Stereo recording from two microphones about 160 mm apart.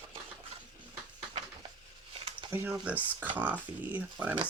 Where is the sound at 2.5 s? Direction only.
15° right (ahead or behind).